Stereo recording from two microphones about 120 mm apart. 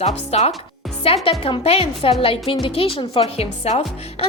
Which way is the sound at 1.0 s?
55° left (ahead or behind).